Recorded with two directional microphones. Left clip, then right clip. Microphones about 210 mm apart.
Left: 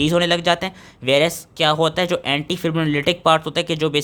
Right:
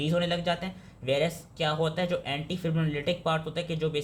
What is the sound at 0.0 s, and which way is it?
Speech, 50° left (ahead or behind).